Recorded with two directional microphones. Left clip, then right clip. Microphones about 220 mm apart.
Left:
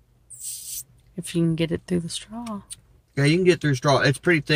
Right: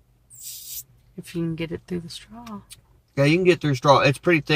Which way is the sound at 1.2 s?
25° left (ahead or behind).